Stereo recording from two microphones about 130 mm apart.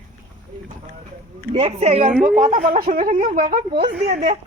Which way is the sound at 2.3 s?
90° right.